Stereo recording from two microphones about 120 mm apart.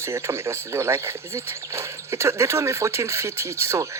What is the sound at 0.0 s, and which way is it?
Speech, 20° right (ahead or behind).